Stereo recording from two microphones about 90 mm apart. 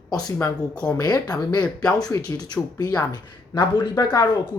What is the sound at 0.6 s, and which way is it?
Speech, 10° left (ahead or behind).